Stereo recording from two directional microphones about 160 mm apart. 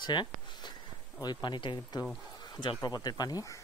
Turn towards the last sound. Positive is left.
turn(degrees=25)  # may be behind; listen again after turning